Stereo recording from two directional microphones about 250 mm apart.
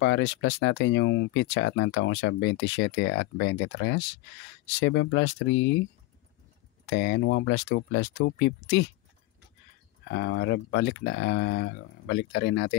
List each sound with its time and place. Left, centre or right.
0.0 s speech: left
6.9 s speech: left
10.0 s speech: left